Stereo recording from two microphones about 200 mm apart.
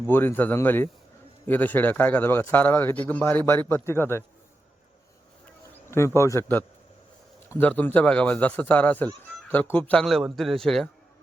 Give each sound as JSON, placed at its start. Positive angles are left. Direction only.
{"t": 0.1, "sound": "a man's voice", "side_deg": 10}
{"t": 6.1, "sound": "a man's voice", "side_deg": 15}